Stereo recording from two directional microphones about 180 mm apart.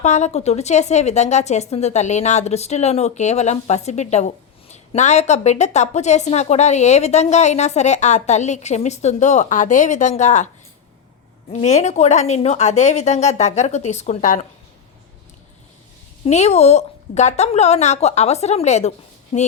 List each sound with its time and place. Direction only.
0.0 s a woman's voice: 40° left (ahead or behind)
11.5 s a woman's voice: 40° left (ahead or behind)
16.2 s a woman's voice: 35° left (ahead or behind)